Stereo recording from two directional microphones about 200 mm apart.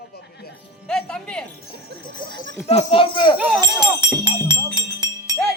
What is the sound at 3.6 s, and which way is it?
Music, 20° right (ahead or behind).